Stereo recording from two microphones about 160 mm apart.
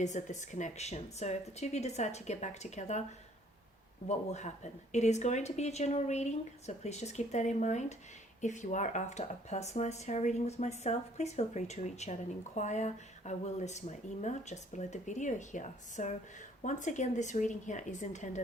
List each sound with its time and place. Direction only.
0.0 s speech: 50° left (ahead or behind)
4.3 s speech: 45° left (ahead or behind)